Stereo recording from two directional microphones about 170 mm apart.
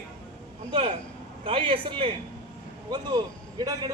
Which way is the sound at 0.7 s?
35° right (ahead or behind).